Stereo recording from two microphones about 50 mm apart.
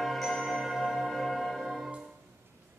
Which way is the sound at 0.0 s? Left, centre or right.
Centre.